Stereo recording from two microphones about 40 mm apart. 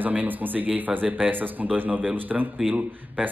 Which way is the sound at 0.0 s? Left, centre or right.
Right.